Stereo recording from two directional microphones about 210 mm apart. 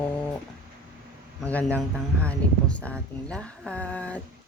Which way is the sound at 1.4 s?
5° left (ahead or behind).